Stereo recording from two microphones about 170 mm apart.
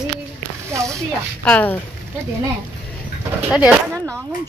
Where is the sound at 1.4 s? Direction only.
10° left (ahead or behind).